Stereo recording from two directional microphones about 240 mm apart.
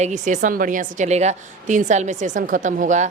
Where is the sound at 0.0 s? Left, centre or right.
Right.